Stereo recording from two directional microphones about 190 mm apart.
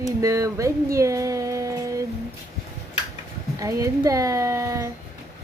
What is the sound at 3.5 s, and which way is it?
A child's voice, 15° right (ahead or behind).